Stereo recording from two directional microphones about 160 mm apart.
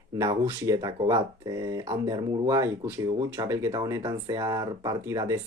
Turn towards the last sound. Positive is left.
turn(degrees=-20)  # may be behind; listen again after turning